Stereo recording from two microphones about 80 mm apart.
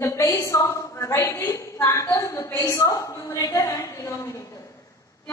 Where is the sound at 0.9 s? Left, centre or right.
Left.